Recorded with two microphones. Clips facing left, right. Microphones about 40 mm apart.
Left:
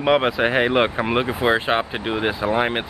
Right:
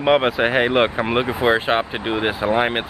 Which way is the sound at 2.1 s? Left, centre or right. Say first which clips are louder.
Right 2 dB; centre.